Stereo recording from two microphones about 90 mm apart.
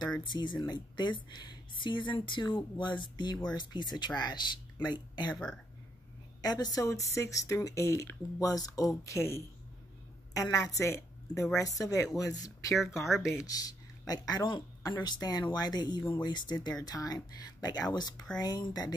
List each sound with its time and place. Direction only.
0.2 s speech: 55° left (ahead or behind)
6.4 s speech: 45° left (ahead or behind)
10.8 s speech: 35° left (ahead or behind)
13.0 s speech: centre (ahead or behind)
13.5 s speech: 45° left (ahead or behind)